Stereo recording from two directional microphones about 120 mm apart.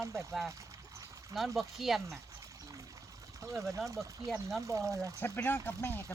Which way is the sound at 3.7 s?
25° right (ahead or behind).